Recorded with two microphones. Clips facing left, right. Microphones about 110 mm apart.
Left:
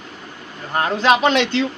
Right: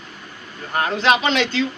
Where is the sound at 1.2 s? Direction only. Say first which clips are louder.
Left 3 dB; 60° left (ahead or behind).